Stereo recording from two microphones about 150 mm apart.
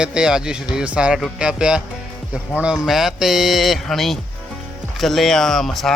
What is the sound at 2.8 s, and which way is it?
Speech, centre (ahead or behind).